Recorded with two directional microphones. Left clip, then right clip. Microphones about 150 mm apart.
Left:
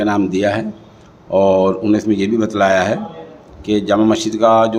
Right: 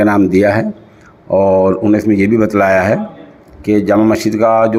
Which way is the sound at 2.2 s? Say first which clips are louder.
Right 4 dB; 35° right (ahead or behind).